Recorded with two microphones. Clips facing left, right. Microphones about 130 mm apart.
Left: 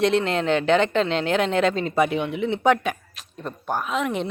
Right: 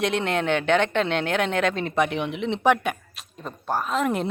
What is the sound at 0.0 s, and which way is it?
Speech, centre (ahead or behind).